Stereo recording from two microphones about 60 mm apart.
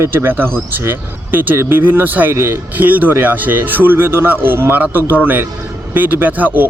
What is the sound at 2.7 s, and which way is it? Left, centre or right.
Speech, right.